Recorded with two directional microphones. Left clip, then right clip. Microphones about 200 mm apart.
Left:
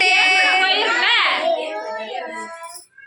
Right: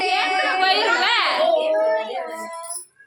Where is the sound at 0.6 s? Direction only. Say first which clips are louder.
Left 1 dB; 70° right (ahead or behind).